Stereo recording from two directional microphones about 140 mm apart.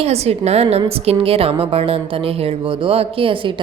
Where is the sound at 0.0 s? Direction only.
50° right (ahead or behind).